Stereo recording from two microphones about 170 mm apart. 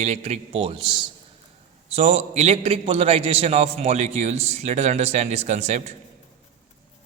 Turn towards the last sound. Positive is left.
turn(degrees=-40)  # may be behind; listen again after turning